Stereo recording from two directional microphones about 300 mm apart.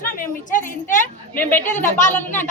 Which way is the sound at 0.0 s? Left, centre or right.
Left.